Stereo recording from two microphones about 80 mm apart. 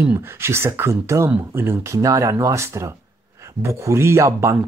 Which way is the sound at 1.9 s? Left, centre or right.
Right.